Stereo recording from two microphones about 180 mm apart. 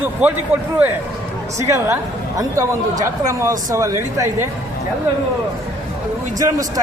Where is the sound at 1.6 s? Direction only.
15° right (ahead or behind).